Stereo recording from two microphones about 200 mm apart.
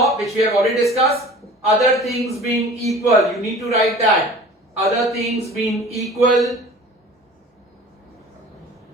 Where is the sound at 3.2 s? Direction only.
Centre (ahead or behind).